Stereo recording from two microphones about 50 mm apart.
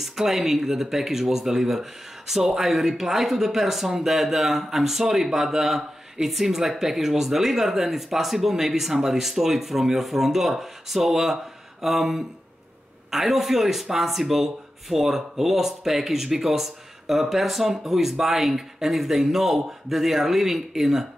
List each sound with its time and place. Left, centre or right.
0.0 s speech: centre